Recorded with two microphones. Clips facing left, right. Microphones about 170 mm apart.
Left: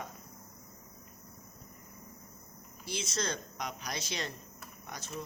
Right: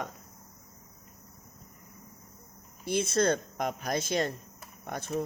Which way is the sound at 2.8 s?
55° right (ahead or behind).